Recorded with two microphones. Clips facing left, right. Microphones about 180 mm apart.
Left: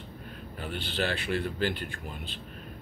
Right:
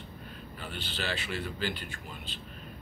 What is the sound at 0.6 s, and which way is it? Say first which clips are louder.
A man's voice: left 7 dB; 55° left (ahead or behind).